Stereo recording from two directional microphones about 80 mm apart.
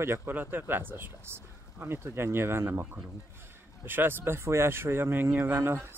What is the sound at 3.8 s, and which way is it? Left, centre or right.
Speech, right.